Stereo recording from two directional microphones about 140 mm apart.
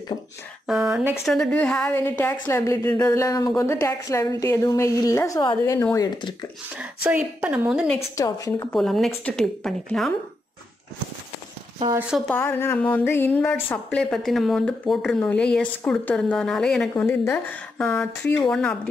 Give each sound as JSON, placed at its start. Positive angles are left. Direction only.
{"t": 0.7, "sound": "a woman's voice", "side_deg": -5}
{"t": 6.8, "sound": "a woman's voice", "side_deg": -10}
{"t": 8.2, "sound": "a woman's voice", "side_deg": 20}
{"t": 8.7, "sound": "a woman's voice", "side_deg": 0}
{"t": 12.3, "sound": "a woman's voice", "side_deg": 15}
{"t": 13.8, "sound": "a woman's voice", "side_deg": 0}
{"t": 16.9, "sound": "a woman's voice", "side_deg": 15}